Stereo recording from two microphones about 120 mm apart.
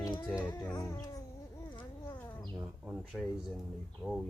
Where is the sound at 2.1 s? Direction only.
15° left (ahead or behind).